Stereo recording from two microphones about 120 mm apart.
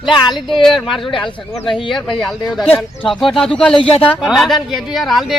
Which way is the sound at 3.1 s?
Centre (ahead or behind).